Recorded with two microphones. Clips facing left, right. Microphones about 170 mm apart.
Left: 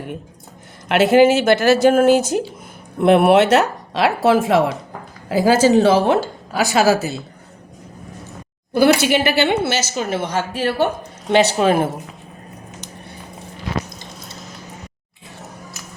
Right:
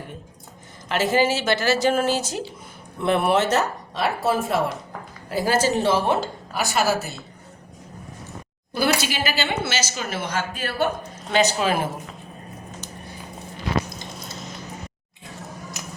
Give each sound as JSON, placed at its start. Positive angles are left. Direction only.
{"t": 0.9, "sound": "speech", "side_deg": 65}
{"t": 8.7, "sound": "a woman's voice", "side_deg": 55}
{"t": 15.8, "sound": "a sound", "side_deg": -20}